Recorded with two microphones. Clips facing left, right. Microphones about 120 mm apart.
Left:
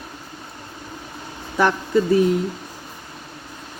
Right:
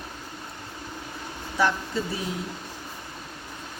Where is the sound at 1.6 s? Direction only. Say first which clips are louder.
Left 5 dB; 55° left (ahead or behind).